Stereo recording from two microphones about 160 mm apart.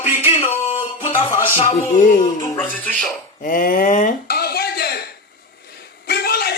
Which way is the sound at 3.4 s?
60° left (ahead or behind).